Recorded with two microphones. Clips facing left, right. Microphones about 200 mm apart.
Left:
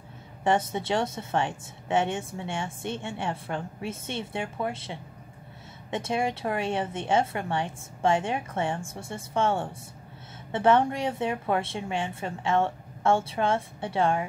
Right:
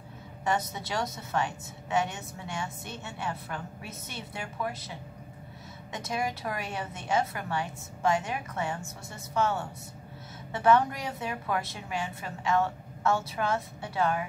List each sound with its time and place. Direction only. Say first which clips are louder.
0.4 s a woman's voice: left 5 dB; 30° left (ahead or behind)